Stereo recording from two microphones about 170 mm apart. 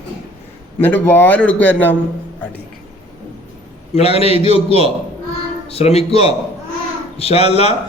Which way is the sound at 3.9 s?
35° left (ahead or behind).